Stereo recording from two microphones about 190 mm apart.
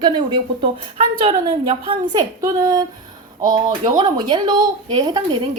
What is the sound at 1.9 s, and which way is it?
Speech, 20° right (ahead or behind).